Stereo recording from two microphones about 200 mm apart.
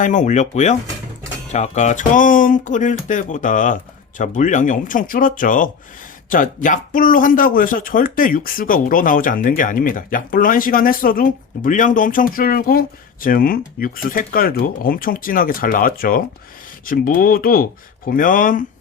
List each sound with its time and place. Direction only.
0.0 s speech: 40° left (ahead or behind)